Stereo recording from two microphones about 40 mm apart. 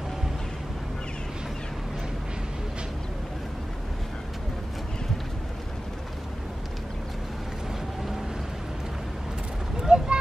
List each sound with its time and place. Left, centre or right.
9.8 s vehicle: centre